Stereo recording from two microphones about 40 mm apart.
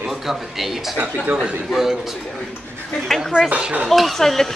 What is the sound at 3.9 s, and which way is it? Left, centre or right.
Speech, centre.